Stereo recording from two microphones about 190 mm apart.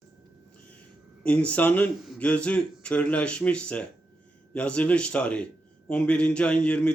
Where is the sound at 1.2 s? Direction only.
5° left (ahead or behind).